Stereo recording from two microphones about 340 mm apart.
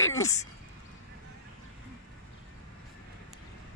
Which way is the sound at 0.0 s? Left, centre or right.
Centre.